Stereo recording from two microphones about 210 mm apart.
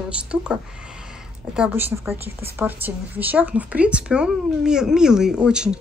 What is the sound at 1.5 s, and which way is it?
Speech, 10° right (ahead or behind).